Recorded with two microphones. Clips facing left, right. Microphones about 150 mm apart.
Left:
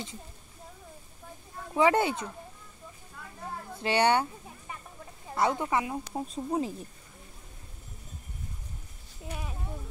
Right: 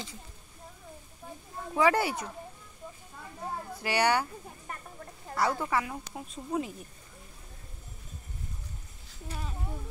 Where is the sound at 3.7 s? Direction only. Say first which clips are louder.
Left 3 dB; 25° left (ahead or behind).